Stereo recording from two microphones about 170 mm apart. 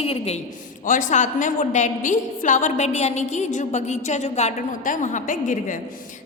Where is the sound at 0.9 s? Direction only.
50° left (ahead or behind).